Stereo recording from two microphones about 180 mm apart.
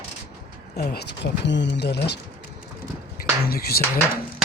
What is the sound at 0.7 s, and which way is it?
Speech, 65° left (ahead or behind).